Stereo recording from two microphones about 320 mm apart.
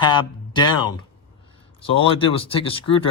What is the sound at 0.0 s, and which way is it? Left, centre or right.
Speech, centre.